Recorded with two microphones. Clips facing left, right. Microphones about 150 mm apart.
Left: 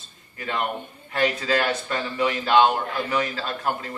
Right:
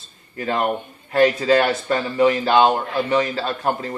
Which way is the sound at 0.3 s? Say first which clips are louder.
Right 6 dB; 35° right (ahead or behind).